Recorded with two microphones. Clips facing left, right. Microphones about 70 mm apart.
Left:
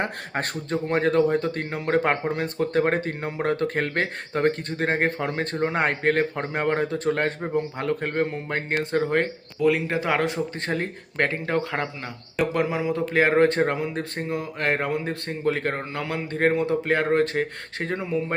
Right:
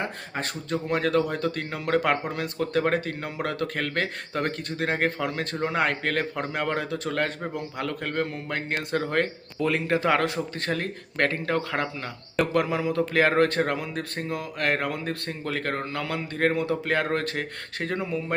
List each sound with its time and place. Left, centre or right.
0.0 s speech: left
0.7 s a man's voice: left
9.6 s a man's voice: centre; by 18.3 s left